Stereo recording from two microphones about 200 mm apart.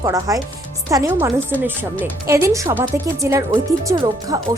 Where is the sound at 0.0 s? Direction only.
15° right (ahead or behind).